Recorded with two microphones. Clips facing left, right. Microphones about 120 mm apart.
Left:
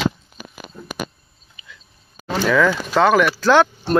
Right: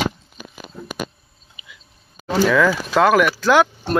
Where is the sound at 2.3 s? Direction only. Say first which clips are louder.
Right 1 dB; 5° right (ahead or behind).